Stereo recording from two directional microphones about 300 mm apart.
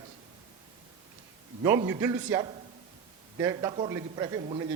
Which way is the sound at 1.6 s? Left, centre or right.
Centre.